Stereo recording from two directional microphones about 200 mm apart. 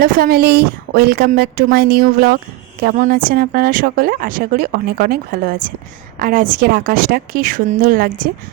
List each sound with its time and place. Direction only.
0.0 s a woman's voice: 45° right (ahead or behind)